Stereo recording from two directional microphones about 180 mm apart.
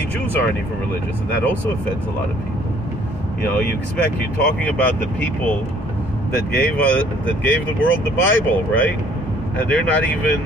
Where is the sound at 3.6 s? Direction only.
60° left (ahead or behind).